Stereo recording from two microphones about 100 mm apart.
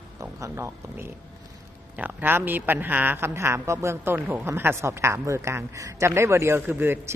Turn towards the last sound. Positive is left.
turn(degrees=-20)  # may be behind; listen again after turning